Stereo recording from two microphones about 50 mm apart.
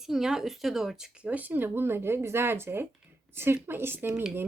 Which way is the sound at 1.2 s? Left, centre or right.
Right.